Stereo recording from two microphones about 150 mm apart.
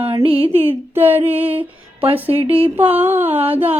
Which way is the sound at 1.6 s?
35° right (ahead or behind).